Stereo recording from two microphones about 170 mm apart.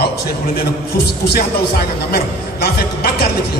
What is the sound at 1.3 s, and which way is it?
A man's voice, 65° left (ahead or behind).